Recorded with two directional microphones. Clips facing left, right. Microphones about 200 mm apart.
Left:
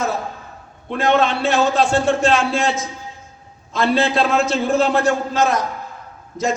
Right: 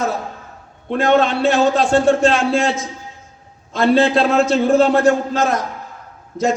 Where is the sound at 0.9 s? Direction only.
40° right (ahead or behind).